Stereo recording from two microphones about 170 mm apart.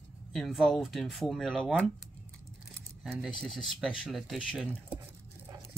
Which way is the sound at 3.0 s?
5° right (ahead or behind).